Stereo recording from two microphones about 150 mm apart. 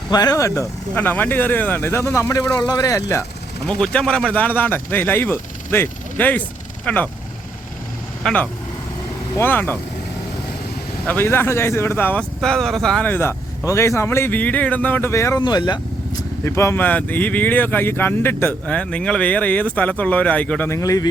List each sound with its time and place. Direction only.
0.1 s speech: 25° left (ahead or behind)
3.7 s speech: 5° left (ahead or behind)
8.2 s speech: 5° left (ahead or behind)
11.0 s speech: 15° left (ahead or behind); by 15.8 s 30° left (ahead or behind)
16.4 s speech: 15° left (ahead or behind)